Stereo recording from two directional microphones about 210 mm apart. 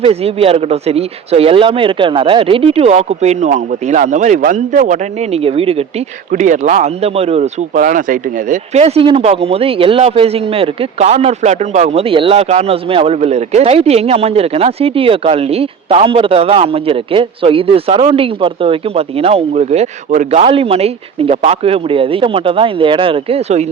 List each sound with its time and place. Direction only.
0.0 s speech: 30° right (ahead or behind)